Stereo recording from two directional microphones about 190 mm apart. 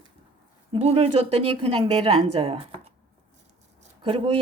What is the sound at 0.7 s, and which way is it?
A woman's voice, 30° right (ahead or behind).